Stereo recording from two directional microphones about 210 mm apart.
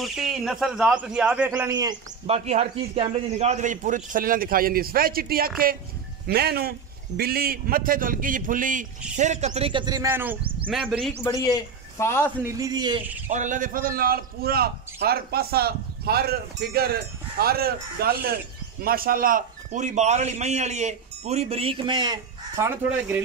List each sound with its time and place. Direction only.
0.0 s speech: centre (ahead or behind)
1.7 s a man's voice: 20° right (ahead or behind); by 11.1 s centre (ahead or behind)
11.4 s a man's voice: 15° left (ahead or behind)
12.4 s a man's voice: 15° right (ahead or behind)
13.3 s a man's voice: 35° right (ahead or behind); by 22.7 s 20° right (ahead or behind)